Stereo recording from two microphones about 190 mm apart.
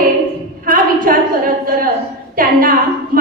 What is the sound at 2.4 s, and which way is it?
Speech, 45° right (ahead or behind).